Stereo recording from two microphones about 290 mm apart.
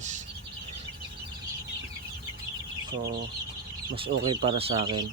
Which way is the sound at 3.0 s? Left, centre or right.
Right.